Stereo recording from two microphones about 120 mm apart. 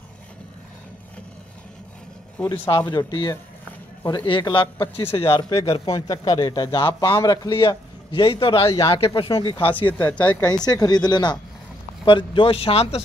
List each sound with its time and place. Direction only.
2.3 s speech: 15° left (ahead or behind)
2.9 s a man's voice: 35° left (ahead or behind)
5.5 s a man's voice: 30° left (ahead or behind); by 9.3 s 45° left (ahead or behind)
9.9 s speech: 15° left (ahead or behind)
10.6 s a man's voice: 35° left (ahead or behind); by 13.0 s 55° left (ahead or behind)